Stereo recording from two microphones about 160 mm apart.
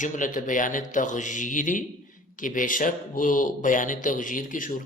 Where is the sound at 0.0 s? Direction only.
55° left (ahead or behind).